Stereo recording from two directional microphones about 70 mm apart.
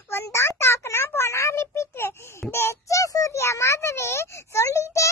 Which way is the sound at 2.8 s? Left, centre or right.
Left.